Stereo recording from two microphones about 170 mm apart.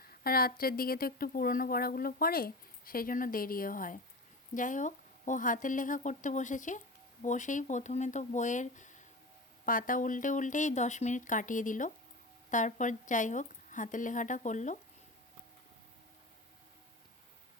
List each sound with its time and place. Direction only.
0.1 s speech: 60° left (ahead or behind); by 14.8 s 45° left (ahead or behind)